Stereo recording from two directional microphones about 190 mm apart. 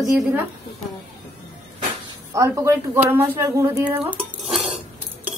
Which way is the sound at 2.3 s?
15° right (ahead or behind).